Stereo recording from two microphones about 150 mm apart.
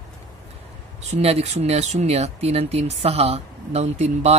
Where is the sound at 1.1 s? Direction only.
45° right (ahead or behind).